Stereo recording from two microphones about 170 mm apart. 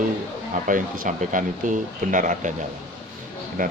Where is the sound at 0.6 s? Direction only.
50° right (ahead or behind).